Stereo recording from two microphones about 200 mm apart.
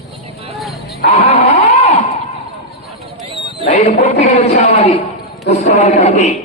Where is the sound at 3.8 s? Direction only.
30° left (ahead or behind).